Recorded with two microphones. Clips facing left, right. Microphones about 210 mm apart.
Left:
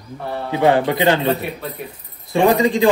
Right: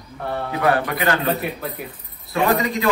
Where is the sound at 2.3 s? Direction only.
30° left (ahead or behind).